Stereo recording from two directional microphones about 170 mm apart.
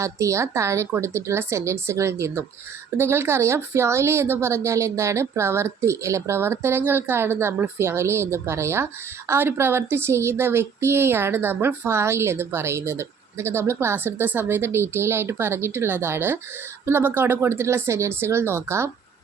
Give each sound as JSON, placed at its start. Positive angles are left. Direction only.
{"t": 0.0, "sound": "speech", "side_deg": -15}